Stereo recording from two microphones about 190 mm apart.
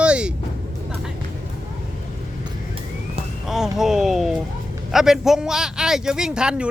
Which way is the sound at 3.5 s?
Centre (ahead or behind).